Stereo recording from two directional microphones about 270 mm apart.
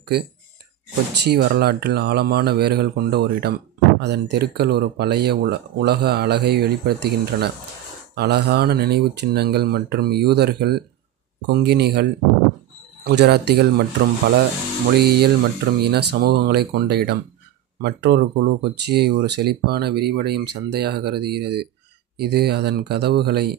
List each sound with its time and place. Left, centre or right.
1.1 s speech: right